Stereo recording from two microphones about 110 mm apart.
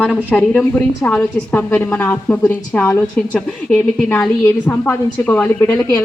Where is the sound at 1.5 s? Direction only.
15° left (ahead or behind).